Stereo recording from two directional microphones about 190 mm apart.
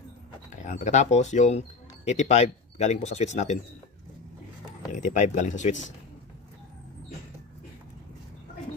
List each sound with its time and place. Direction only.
0.5 s speech: 40° left (ahead or behind)
4.9 s speech: 40° left (ahead or behind)